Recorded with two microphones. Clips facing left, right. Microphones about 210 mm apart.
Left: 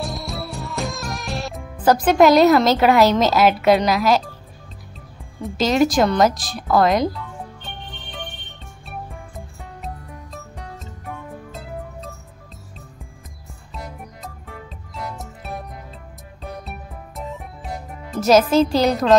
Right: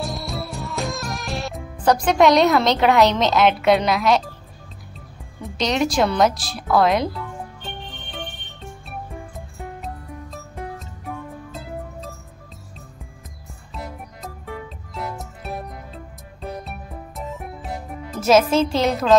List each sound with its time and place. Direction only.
0.0 s music: centre (ahead or behind)
5.4 s speech: centre (ahead or behind)
11.1 s music: centre (ahead or behind)
13.7 s music: centre (ahead or behind)
17.2 s music: centre (ahead or behind)